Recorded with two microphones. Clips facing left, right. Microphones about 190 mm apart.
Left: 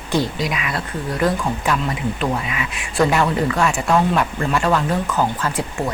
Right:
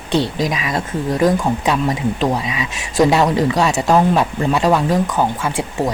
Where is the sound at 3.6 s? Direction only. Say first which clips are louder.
Right 3 dB; 35° right (ahead or behind).